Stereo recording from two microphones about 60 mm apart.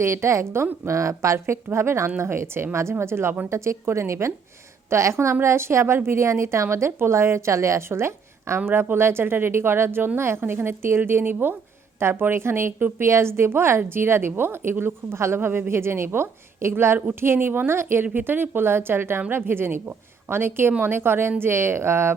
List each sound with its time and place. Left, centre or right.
0.0 s a woman's voice: right
0.9 s a woman's voice: right